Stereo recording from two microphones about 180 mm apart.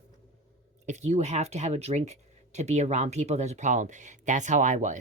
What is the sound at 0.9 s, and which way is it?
Speech, 40° right (ahead or behind).